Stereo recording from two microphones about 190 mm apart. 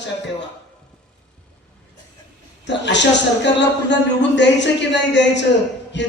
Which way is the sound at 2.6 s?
70° left (ahead or behind).